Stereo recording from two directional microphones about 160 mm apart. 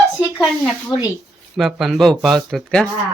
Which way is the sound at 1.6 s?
Centre (ahead or behind).